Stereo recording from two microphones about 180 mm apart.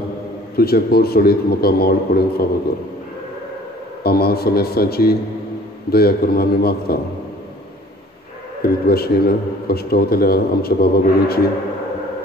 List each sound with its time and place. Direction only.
0.6 s a man's voice: 60° left (ahead or behind)
4.0 s a man's voice: 60° left (ahead or behind)
8.8 s a man's voice: 60° left (ahead or behind)